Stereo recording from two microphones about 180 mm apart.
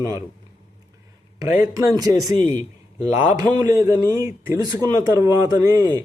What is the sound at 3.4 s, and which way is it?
Speech, 20° right (ahead or behind).